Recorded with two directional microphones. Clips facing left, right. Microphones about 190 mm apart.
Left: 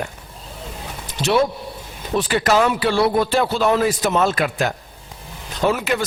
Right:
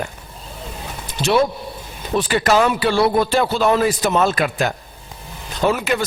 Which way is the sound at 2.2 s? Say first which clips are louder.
Right 1 dB; 15° right (ahead or behind).